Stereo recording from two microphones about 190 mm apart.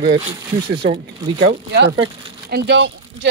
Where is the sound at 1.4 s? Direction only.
65° right (ahead or behind).